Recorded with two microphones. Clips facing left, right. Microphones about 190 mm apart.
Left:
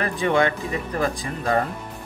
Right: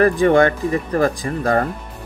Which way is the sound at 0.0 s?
45° right (ahead or behind).